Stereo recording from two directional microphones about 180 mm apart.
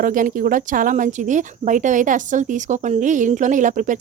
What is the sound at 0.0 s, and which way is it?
A woman's voice, 50° right (ahead or behind).